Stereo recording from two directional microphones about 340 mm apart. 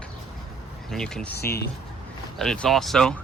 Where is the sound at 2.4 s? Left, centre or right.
Centre.